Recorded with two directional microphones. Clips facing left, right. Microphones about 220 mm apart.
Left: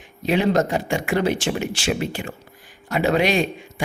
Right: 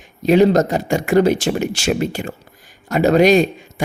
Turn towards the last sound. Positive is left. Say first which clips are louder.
# right 7 dB
turn(degrees=-40)  # may be behind; listen again after turning